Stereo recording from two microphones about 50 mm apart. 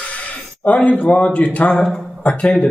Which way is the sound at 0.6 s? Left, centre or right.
Left.